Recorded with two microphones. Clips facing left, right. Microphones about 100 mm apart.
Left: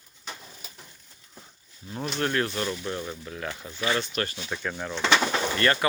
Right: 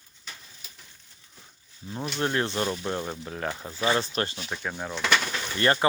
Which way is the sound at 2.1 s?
20° right (ahead or behind).